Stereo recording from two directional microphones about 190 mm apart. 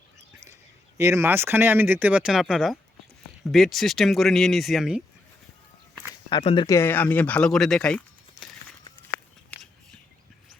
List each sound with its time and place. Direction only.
0.9 s speech: 15° right (ahead or behind)
6.3 s speech: 30° left (ahead or behind)
6.7 s speech: 15° left (ahead or behind)